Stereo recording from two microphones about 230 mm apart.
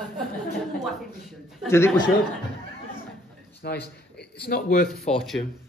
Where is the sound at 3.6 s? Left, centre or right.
Left.